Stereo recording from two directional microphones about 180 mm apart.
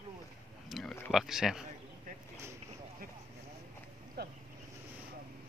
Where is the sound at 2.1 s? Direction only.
50° right (ahead or behind).